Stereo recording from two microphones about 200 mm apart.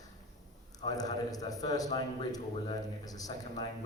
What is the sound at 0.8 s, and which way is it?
A man's voice, 20° left (ahead or behind).